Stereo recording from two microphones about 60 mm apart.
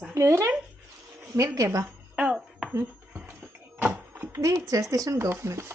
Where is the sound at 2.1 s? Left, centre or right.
Centre.